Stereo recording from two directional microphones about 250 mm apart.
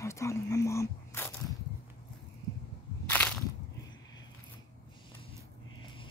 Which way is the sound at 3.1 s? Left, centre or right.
Centre.